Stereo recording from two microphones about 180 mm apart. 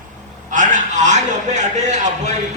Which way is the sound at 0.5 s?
45° right (ahead or behind).